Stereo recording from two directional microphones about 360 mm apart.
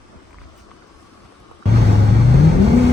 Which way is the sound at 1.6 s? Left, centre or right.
Right.